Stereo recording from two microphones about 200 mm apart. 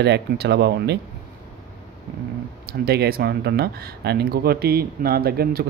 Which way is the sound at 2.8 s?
50° right (ahead or behind).